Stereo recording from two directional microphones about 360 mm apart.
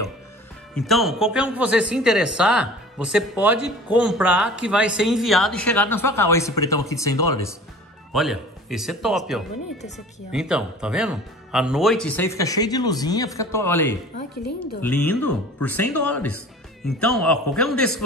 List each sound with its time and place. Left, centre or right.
0.7 s speech: centre
7.2 s speech: left
8.1 s speech: centre
15.6 s speech: centre